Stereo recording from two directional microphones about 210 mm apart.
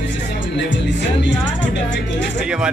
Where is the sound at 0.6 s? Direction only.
60° left (ahead or behind).